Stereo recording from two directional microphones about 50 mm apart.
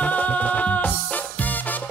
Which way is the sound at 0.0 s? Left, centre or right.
Left.